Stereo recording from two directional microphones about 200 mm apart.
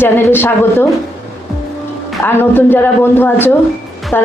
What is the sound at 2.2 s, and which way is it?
Speech, 10° left (ahead or behind).